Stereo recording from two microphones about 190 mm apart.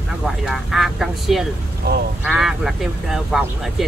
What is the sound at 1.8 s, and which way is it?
Speech, 60° right (ahead or behind).